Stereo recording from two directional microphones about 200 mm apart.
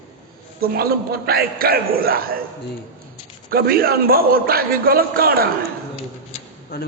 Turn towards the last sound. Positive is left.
turn(degrees=50)  # may be behind; listen again after turning